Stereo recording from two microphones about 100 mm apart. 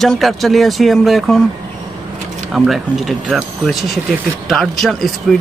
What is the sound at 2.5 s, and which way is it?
Speech, 5° right (ahead or behind).